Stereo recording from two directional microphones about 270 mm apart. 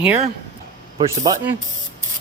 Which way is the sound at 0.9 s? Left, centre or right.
Centre.